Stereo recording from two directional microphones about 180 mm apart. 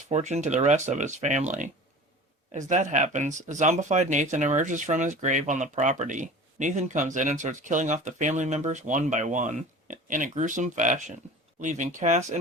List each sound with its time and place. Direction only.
0.1 s speech: 40° right (ahead or behind)